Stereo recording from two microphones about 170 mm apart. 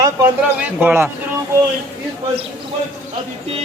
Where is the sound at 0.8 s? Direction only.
10° right (ahead or behind).